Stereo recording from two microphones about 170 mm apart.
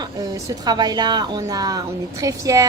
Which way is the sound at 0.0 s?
20° right (ahead or behind).